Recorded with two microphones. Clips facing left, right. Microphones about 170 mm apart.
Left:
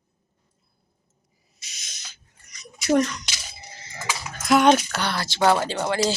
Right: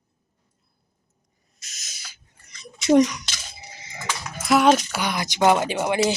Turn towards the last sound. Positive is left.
turn(degrees=-15)  # may be behind; listen again after turning